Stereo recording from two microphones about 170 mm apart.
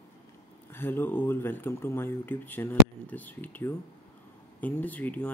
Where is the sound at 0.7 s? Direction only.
10° left (ahead or behind).